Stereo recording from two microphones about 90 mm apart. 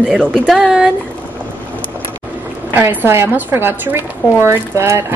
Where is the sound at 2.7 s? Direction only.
25° right (ahead or behind).